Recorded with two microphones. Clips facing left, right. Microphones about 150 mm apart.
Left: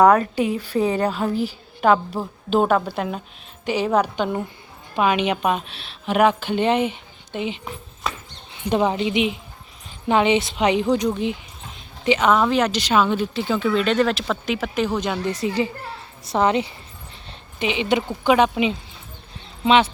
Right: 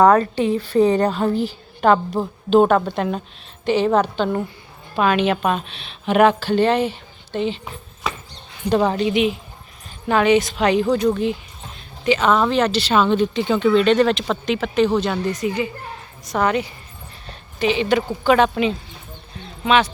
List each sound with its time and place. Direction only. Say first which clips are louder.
0.0 s a woman's voice: right 1 dB; 10° left (ahead or behind)
6.4 s a woman's voice: right 2 dB; 15° left (ahead or behind)
8.7 s a woman's voice: right 2 dB; 20° left (ahead or behind)
15.3 s a child's voice: even; 30° left (ahead or behind); by 18.8 s 15° left (ahead or behind)
19.6 s speech: left 1 dB; 25° left (ahead or behind)